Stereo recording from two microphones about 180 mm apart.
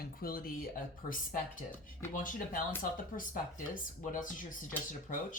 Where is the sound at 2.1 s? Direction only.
50° left (ahead or behind).